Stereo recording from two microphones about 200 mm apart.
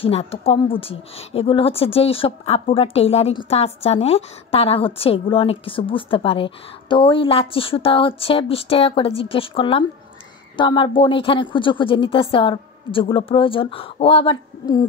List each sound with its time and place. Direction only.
0.0 s a woman's voice: 30° left (ahead or behind)